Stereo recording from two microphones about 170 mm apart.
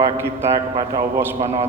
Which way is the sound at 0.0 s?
15° right (ahead or behind).